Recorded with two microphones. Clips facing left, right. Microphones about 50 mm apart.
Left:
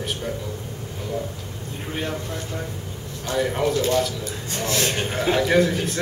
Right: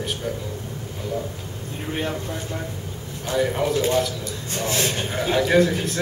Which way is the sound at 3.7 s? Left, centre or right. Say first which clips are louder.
Even; centre.